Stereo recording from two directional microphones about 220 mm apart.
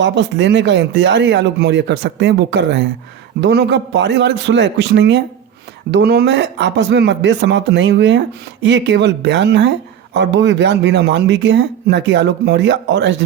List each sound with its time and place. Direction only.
0.0 s speech: 55° right (ahead or behind)